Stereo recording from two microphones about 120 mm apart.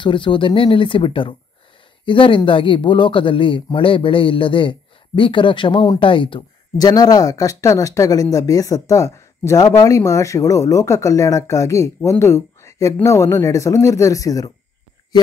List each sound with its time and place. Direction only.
0.0 s speech: 45° left (ahead or behind)